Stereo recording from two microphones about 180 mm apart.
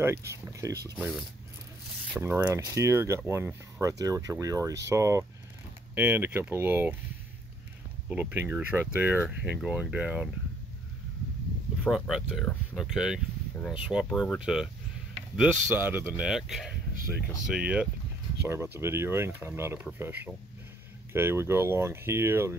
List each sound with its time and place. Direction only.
0.0 s speech: 15° right (ahead or behind)
2.1 s speech: 10° right (ahead or behind)
8.1 s speech: 10° right (ahead or behind)
11.8 s speech: centre (ahead or behind)